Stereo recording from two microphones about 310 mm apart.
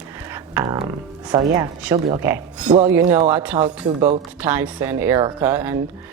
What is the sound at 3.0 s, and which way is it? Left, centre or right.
Speech, right.